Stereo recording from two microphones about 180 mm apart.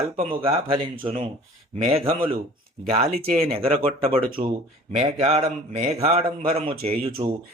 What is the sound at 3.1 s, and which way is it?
Speech, 55° right (ahead or behind).